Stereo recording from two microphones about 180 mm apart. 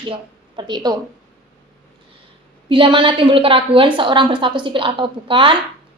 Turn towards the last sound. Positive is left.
turn(degrees=-30)  # may be behind; listen again after turning